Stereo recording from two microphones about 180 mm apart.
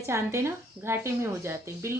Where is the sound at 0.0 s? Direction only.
15° right (ahead or behind).